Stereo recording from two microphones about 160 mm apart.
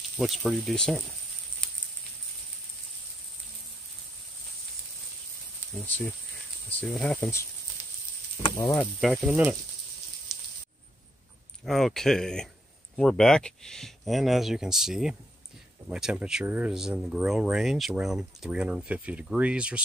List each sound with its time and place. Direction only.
0.2 s speech: centre (ahead or behind)
5.8 s speech: 10° left (ahead or behind)
8.4 s speech: 30° left (ahead or behind)
9.0 s speech: 5° right (ahead or behind)
10.3 s a sound: centre (ahead or behind)
11.6 s speech: centre (ahead or behind)